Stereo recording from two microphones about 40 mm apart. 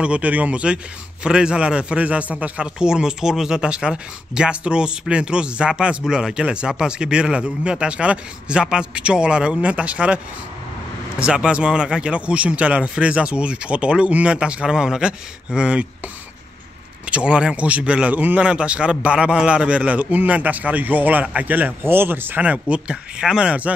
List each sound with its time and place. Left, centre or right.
0.0 s a man's voice: right
2.6 s speech: centre
9.6 s a man's voice: right
11.5 s speech: right
14.7 s speech: centre
17.0 s speech: right
17.6 s a man's voice: right
18.1 s a man's voice: right
18.4 s a man's voice: right
21.8 s speech: right
22.4 s speech: right